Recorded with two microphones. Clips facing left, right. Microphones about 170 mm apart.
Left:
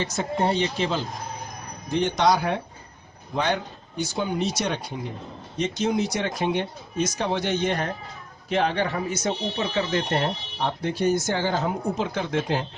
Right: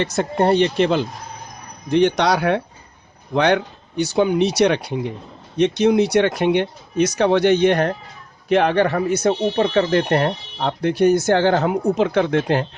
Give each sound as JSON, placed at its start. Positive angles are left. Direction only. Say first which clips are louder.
{"t": 0.0, "sound": "speech", "louder": "right 6 dB", "side_deg": -65}